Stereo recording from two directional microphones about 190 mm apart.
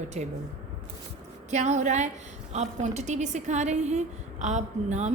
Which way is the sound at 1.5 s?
35° right (ahead or behind).